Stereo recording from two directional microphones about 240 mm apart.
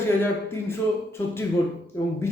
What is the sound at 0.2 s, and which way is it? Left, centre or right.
Speech, centre.